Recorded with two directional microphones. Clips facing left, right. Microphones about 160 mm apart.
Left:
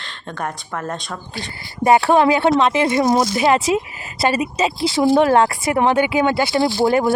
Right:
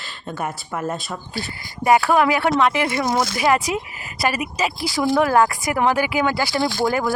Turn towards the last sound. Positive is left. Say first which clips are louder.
# left 4 dB
turn(degrees=25)  # may be behind; listen again after turning